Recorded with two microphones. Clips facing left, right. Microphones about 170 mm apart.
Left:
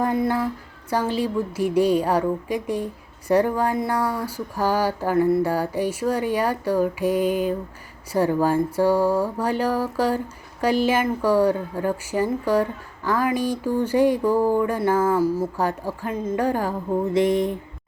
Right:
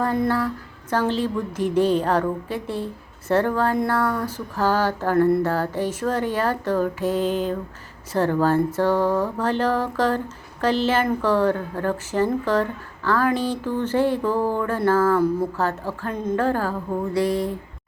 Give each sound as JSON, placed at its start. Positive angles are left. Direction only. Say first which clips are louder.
{"t": 0.0, "sound": "a woman's voice", "louder": "even", "side_deg": 15}